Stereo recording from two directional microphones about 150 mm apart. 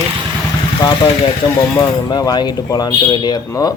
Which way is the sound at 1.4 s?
25° left (ahead or behind).